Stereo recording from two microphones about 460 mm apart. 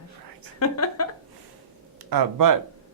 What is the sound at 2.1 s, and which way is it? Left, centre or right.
Speech, right.